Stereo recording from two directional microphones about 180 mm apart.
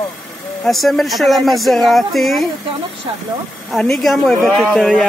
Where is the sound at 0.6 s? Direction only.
Centre (ahead or behind).